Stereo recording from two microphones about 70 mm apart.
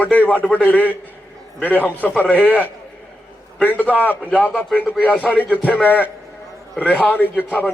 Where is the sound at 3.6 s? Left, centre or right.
Left.